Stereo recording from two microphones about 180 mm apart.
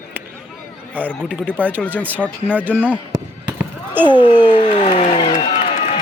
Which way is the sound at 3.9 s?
10° right (ahead or behind).